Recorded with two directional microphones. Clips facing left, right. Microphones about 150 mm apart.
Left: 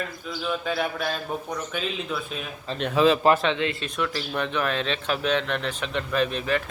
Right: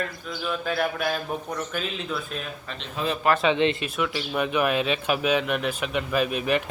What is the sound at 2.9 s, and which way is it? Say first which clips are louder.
Speech: left 9 dB; 90° left.